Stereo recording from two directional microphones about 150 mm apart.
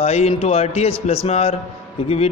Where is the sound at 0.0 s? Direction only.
45° left (ahead or behind).